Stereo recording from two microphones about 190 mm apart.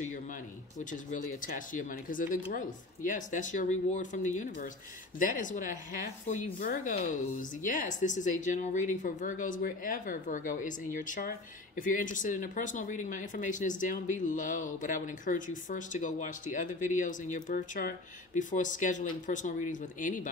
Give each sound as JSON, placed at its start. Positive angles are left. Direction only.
{"t": 0.7, "sound": "speech", "side_deg": 40}